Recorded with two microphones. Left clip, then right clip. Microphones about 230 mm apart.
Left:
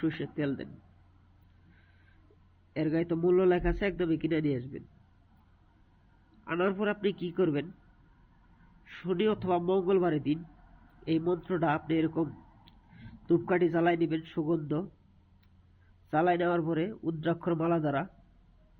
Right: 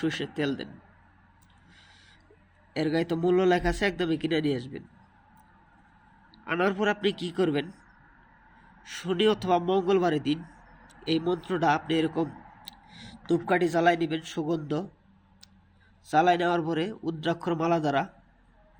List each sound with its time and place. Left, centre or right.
0.0 s a man's voice: centre
2.7 s a man's voice: centre
6.4 s a man's voice: centre
8.8 s a man's voice: centre
16.0 s a man's voice: centre